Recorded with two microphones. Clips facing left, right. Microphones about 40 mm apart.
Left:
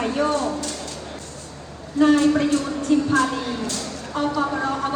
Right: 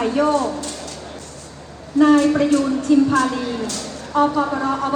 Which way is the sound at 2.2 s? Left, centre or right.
Right.